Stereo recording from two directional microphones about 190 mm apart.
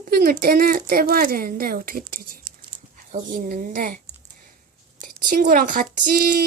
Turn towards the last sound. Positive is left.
turn(degrees=-50)  # may be behind; listen again after turning